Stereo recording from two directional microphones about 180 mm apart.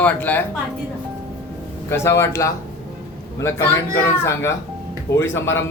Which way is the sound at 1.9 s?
15° left (ahead or behind).